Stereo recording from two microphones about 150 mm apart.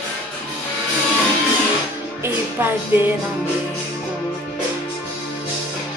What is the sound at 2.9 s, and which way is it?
Music, 15° right (ahead or behind).